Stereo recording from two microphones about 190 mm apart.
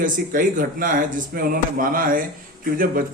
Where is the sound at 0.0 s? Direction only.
45° right (ahead or behind).